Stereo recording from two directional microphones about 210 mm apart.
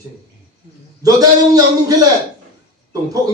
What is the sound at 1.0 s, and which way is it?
Speech, 15° right (ahead or behind).